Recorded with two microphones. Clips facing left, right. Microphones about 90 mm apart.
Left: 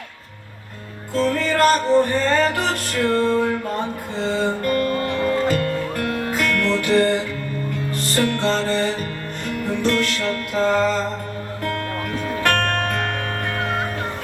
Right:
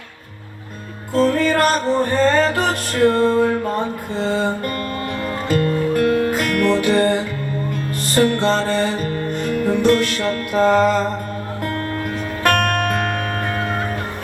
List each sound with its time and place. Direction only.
1.1 s music: 20° right (ahead or behind)
12.4 s music: 15° right (ahead or behind)